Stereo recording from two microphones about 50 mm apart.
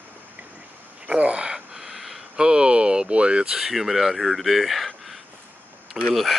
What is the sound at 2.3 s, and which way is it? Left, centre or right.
Speech, centre.